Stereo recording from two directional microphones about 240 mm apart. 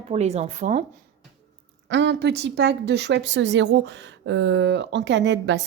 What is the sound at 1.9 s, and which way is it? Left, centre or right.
Speech, right.